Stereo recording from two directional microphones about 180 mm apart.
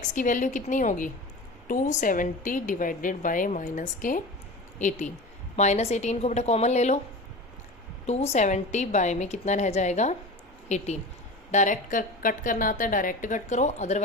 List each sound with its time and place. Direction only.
0.1 s a woman's voice: 45° left (ahead or behind)
8.0 s a woman's voice: 35° left (ahead or behind)